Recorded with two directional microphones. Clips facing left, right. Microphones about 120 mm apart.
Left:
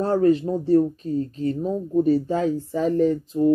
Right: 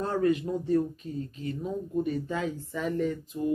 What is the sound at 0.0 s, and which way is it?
Speech, 35° left (ahead or behind).